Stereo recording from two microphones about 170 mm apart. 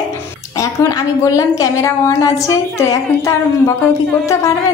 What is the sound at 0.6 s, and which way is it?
A woman's voice, 20° left (ahead or behind).